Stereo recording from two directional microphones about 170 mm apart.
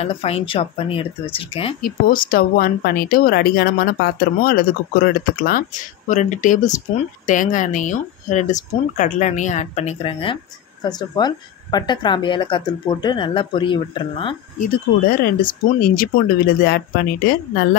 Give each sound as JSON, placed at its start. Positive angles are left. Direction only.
{"t": 0.0, "sound": "speech", "side_deg": 35}
{"t": 1.8, "sound": "speech", "side_deg": 60}
{"t": 15.0, "sound": "speech", "side_deg": 60}